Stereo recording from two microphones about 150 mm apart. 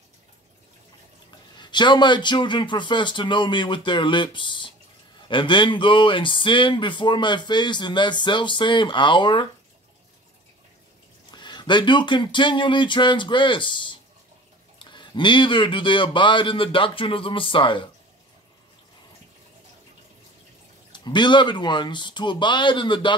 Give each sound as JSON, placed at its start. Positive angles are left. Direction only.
{"t": 1.6, "sound": "speech", "side_deg": 30}
{"t": 11.3, "sound": "speech", "side_deg": 30}
{"t": 20.9, "sound": "speech", "side_deg": 30}